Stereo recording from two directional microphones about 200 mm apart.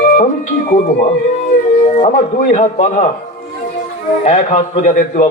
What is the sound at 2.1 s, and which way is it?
A man's voice, 40° left (ahead or behind).